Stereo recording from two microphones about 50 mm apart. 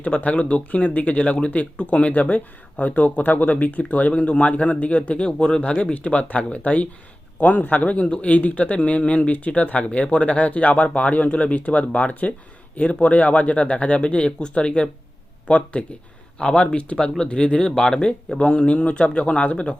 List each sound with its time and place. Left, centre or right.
0.0 s speech: left